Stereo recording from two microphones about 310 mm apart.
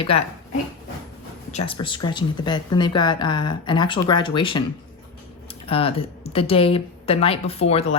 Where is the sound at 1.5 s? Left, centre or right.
Centre.